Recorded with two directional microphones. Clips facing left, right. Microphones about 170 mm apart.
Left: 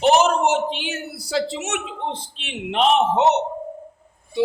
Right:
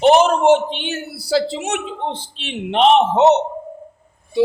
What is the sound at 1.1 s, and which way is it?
A man's voice, 35° right (ahead or behind).